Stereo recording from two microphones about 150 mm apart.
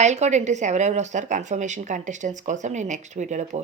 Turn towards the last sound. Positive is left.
turn(degrees=-50)  # may be behind; listen again after turning